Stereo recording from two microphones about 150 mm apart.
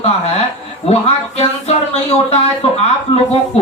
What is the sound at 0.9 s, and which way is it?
Speech, 45° left (ahead or behind).